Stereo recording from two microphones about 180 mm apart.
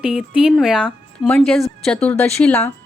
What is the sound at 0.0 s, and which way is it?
Speech, 5° right (ahead or behind).